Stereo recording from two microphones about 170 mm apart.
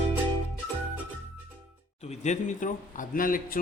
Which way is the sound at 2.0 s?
45° left (ahead or behind).